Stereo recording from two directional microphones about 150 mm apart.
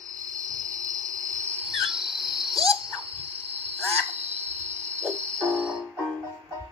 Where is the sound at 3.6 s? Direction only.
45° right (ahead or behind).